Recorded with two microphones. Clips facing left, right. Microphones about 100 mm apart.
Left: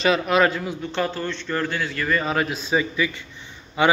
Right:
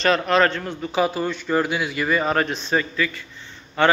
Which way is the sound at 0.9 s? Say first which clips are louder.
Right 5 dB; 10° right (ahead or behind).